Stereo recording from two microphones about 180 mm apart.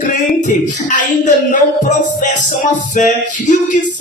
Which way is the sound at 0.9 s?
45° left (ahead or behind).